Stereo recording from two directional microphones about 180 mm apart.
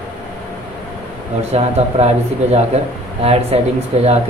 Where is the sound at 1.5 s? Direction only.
35° right (ahead or behind).